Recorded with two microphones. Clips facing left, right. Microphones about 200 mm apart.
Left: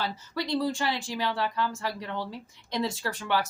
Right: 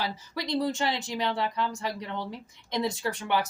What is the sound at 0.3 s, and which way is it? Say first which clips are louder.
Speech: even; 20° right (ahead or behind).